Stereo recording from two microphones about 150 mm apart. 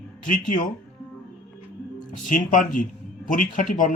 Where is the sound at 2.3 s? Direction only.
60° left (ahead or behind).